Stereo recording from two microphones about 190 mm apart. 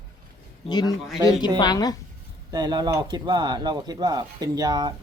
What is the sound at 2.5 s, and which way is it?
Speech, 20° right (ahead or behind).